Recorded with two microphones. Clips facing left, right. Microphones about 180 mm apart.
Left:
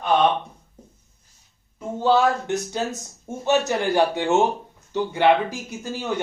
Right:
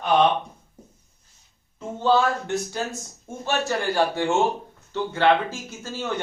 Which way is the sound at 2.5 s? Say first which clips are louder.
Left 2 dB; 20° left (ahead or behind).